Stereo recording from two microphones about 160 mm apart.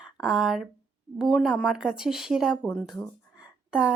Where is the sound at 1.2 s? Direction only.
5° right (ahead or behind).